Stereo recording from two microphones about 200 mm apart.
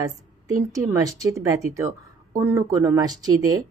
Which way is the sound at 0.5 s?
15° right (ahead or behind).